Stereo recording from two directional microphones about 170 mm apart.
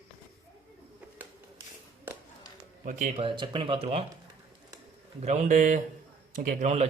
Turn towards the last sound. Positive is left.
turn(degrees=-45)  # may be behind; listen again after turning